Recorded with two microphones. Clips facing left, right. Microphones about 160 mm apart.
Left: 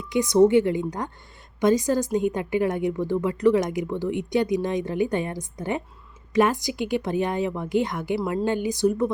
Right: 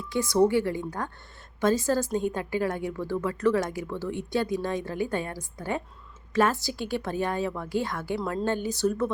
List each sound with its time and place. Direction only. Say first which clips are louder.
0.0 s a woman's voice: left 5 dB; 15° left (ahead or behind)